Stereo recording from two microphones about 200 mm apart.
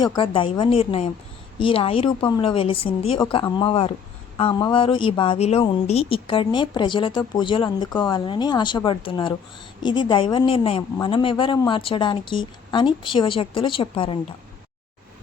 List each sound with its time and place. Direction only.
0.2 s speech: 25° left (ahead or behind)